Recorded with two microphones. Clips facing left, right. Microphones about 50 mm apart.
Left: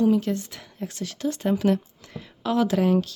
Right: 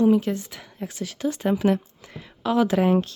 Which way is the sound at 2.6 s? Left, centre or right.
Right.